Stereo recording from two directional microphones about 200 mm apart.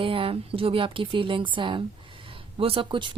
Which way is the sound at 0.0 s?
25° right (ahead or behind).